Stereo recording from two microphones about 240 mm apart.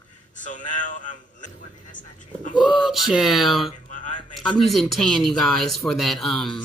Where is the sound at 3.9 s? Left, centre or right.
Left.